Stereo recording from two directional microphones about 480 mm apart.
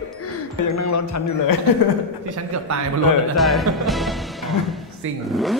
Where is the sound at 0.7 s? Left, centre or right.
Left.